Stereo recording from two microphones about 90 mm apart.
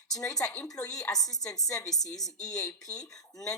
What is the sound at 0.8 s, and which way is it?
A woman's voice, 5° left (ahead or behind).